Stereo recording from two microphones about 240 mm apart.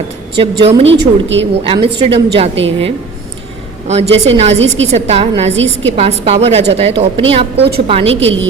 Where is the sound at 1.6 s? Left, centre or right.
Right.